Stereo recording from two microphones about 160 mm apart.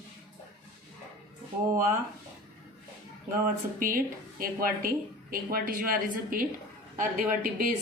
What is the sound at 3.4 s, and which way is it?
Speech, 60° right (ahead or behind).